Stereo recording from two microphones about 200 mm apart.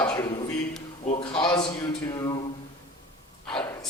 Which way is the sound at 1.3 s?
25° left (ahead or behind).